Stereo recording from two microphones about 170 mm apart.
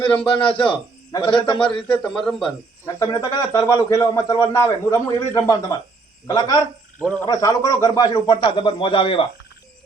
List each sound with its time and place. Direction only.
0.3 s a man's voice: 5° left (ahead or behind)
1.1 s a man's voice: 30° left (ahead or behind)
1.9 s a man's voice: 5° left (ahead or behind)
2.8 s a man's voice: 20° left (ahead or behind)
7.0 s a man's voice: 5° left (ahead or behind)
7.3 s a man's voice: 20° left (ahead or behind)